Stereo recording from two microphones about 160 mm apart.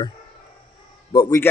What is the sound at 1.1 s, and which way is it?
Speech, 25° left (ahead or behind).